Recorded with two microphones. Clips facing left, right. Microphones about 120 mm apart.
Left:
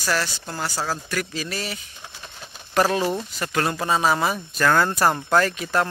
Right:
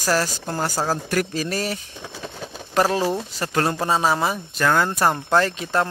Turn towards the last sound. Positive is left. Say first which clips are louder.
# right 1 dB
turn(degrees=-25)  # may be behind; listen again after turning